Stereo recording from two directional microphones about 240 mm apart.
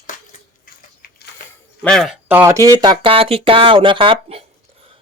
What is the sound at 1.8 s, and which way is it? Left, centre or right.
Speech, centre.